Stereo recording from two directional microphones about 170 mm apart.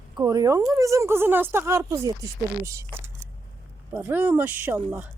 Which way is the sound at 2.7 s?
15° right (ahead or behind).